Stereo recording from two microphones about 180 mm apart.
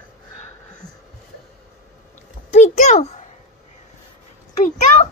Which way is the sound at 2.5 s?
40° left (ahead or behind).